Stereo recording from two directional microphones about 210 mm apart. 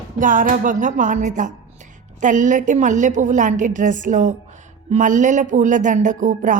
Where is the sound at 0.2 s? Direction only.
40° right (ahead or behind).